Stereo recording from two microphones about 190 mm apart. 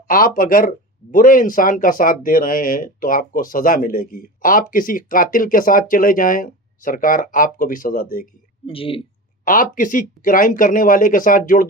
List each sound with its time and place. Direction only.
0.1 s speech: 45° left (ahead or behind)
8.6 s speech: 30° left (ahead or behind)
9.4 s speech: 45° left (ahead or behind)